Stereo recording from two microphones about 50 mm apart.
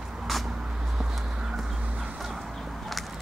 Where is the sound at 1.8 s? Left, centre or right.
Right.